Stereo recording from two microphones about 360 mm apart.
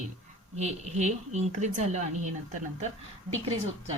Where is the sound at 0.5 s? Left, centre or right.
Centre.